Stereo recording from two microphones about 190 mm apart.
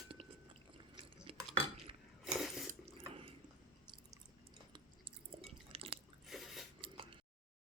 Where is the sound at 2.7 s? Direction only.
30° right (ahead or behind).